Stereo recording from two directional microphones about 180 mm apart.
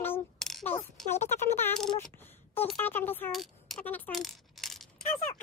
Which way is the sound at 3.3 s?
Centre (ahead or behind).